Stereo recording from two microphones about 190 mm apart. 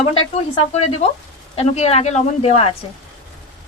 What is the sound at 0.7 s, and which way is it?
A woman's voice, 35° left (ahead or behind).